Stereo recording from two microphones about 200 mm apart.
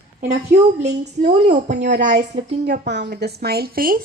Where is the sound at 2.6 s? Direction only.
60° right (ahead or behind).